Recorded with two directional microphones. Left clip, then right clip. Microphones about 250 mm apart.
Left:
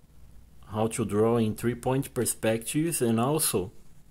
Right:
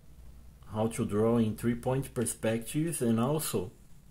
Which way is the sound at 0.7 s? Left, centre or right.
Left.